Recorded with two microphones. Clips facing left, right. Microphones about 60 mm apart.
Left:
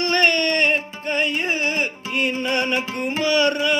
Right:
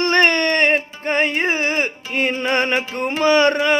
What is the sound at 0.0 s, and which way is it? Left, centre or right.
Music, right.